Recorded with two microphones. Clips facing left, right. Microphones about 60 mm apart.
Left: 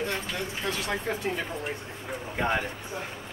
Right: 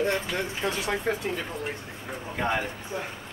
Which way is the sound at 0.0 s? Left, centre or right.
Right.